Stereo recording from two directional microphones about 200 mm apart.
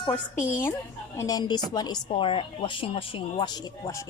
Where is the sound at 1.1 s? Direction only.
15° left (ahead or behind).